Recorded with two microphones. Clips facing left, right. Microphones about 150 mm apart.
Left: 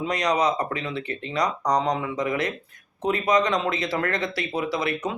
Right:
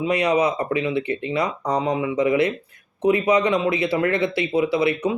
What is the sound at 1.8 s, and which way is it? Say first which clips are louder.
Speech: right 3 dB; 5° right (ahead or behind).